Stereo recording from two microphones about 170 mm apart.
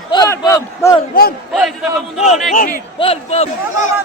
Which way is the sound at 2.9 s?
35° left (ahead or behind).